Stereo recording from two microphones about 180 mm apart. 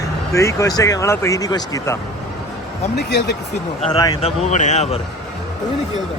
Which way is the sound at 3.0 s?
70° left (ahead or behind).